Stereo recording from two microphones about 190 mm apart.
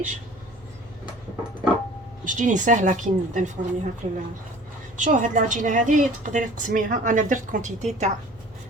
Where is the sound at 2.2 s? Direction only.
40° right (ahead or behind).